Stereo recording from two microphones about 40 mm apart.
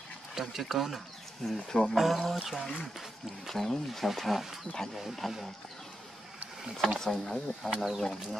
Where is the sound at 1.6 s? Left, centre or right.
Centre.